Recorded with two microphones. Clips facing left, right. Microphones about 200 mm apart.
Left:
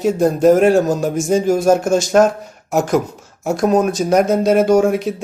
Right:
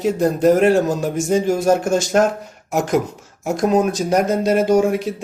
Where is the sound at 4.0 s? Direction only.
Centre (ahead or behind).